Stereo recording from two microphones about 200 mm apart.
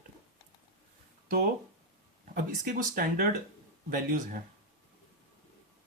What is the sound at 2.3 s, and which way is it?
Speech, 45° right (ahead or behind).